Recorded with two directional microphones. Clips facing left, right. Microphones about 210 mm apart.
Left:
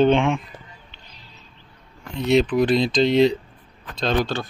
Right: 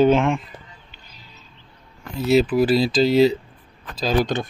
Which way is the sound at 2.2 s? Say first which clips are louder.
Right 1 dB; 5° right (ahead or behind).